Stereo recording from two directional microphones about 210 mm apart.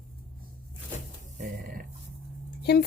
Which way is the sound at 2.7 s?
50° left (ahead or behind).